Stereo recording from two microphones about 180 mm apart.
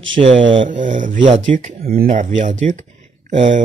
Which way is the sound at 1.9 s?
50° right (ahead or behind).